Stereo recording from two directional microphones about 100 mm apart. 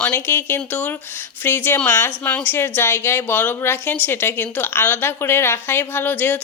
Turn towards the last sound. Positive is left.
turn(degrees=20)  # may be behind; listen again after turning